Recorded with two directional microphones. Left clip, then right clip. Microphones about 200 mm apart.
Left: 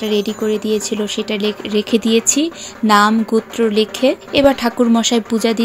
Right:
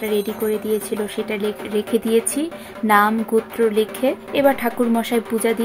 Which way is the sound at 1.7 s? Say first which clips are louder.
Left 3 dB; 25° left (ahead or behind).